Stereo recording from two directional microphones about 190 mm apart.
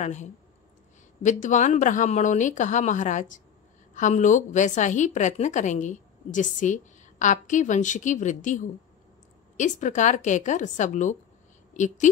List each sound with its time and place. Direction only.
0.0 s a woman's voice: 40° left (ahead or behind)